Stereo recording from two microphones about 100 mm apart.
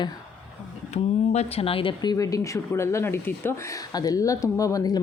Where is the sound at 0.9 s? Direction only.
90° left; by 1.9 s 70° left (ahead or behind).